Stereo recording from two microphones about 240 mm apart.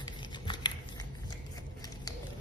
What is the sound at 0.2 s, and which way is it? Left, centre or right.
Biting, centre.